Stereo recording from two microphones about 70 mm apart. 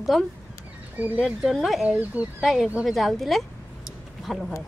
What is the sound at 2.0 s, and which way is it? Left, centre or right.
Speech, right.